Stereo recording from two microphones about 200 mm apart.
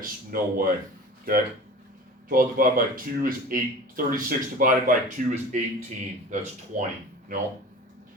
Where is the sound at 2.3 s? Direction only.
45° right (ahead or behind).